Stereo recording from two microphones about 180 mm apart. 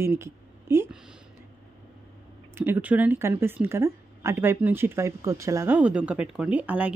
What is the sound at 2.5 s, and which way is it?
Speech, 10° right (ahead or behind).